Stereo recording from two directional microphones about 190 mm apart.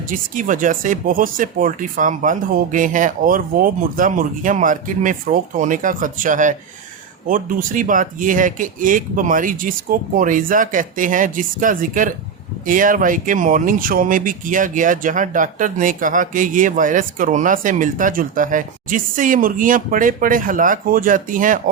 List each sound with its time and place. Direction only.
0.1 s speech: 45° right (ahead or behind)